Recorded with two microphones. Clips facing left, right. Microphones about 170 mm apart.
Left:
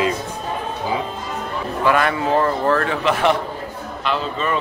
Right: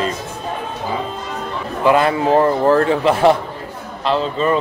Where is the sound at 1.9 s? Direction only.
25° right (ahead or behind).